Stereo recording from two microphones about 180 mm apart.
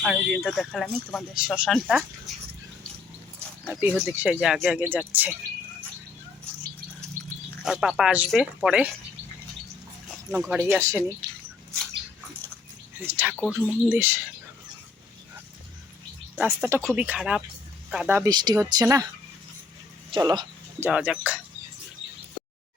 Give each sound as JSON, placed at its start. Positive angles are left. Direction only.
{"t": 0.0, "sound": "speech", "side_deg": 0}
{"t": 3.7, "sound": "speech", "side_deg": -10}
{"t": 7.6, "sound": "speech", "side_deg": -5}
{"t": 10.1, "sound": "dog", "side_deg": -5}
{"t": 10.8, "sound": "speech", "side_deg": -15}
{"t": 13.0, "sound": "speech", "side_deg": -10}
{"t": 13.9, "sound": "speech", "side_deg": -10}
{"t": 16.4, "sound": "speech", "side_deg": -10}
{"t": 18.2, "sound": "speech", "side_deg": -25}
{"t": 20.1, "sound": "speech", "side_deg": -25}
{"t": 20.7, "sound": "speech", "side_deg": -10}